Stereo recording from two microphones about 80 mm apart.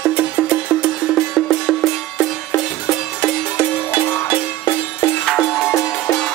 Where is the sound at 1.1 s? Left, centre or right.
Centre.